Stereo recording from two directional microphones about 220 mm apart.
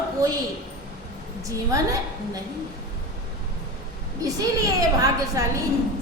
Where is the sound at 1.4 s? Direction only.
15° right (ahead or behind).